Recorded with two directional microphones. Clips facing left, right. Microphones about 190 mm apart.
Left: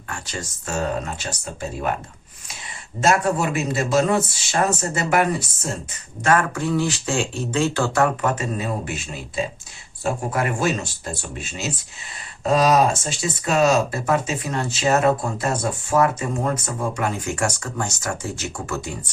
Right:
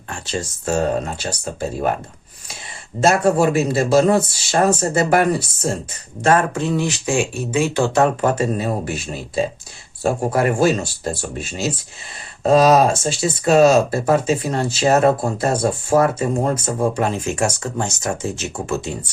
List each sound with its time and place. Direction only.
0.1 s speech: 30° right (ahead or behind)
3.0 s speech: 30° right (ahead or behind)
6.2 s speech: 25° right (ahead or behind)